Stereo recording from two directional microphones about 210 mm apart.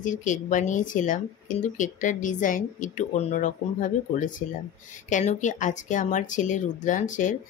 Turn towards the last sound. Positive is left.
turn(degrees=35)  # may be behind; listen again after turning